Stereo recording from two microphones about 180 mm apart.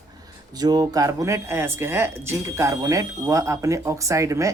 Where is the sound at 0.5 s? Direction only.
20° right (ahead or behind).